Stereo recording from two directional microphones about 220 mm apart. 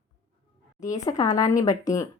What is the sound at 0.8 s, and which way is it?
A woman's voice, 15° left (ahead or behind).